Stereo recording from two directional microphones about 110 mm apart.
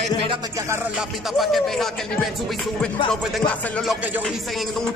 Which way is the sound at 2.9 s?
50° left (ahead or behind).